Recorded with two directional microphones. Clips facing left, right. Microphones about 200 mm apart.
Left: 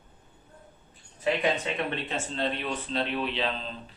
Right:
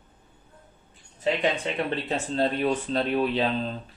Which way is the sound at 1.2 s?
25° right (ahead or behind).